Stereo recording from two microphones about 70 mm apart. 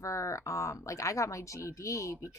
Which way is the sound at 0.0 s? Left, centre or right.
Left.